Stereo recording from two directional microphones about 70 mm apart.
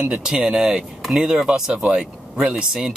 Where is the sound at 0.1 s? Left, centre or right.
Centre.